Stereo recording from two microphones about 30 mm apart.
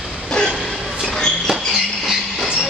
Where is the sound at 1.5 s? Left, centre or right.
Centre.